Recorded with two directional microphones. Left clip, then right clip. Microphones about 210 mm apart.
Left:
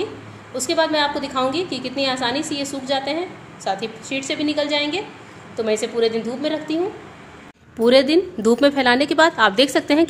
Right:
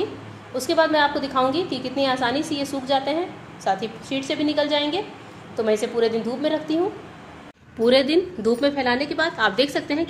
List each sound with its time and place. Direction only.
0.6 s a woman's voice: centre (ahead or behind)
7.8 s a woman's voice: 20° left (ahead or behind)